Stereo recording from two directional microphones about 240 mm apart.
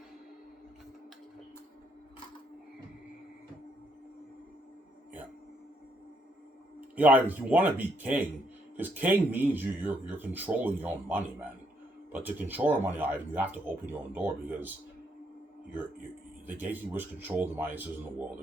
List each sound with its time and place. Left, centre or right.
6.9 s speech: centre
16.5 s speech: centre